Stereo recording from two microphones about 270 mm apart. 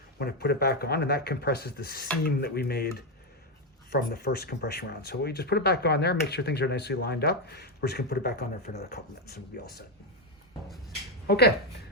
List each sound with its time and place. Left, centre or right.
0.2 s speech: left
11.3 s speech: left